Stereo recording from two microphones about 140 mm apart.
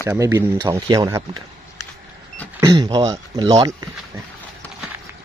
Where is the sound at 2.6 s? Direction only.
25° right (ahead or behind).